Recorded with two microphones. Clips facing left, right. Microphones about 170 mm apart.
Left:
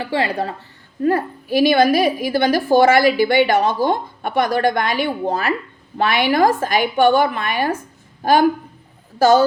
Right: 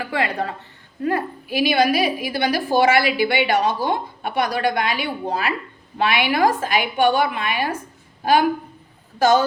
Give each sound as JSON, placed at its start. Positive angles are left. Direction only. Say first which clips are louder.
{"t": 0.0, "sound": "a woman's voice", "louder": "left 3 dB", "side_deg": 30}